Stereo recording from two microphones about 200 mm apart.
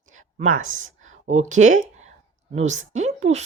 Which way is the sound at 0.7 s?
40° right (ahead or behind).